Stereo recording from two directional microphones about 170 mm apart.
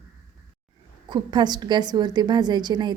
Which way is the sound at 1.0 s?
25° right (ahead or behind).